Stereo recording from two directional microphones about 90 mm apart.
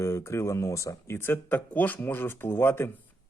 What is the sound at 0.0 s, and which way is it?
A man's voice, 30° left (ahead or behind).